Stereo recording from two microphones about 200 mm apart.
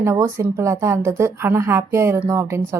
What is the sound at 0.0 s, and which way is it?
A woman's voice, 15° right (ahead or behind).